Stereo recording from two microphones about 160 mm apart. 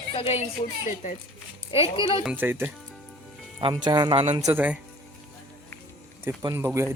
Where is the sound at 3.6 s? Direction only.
30° right (ahead or behind).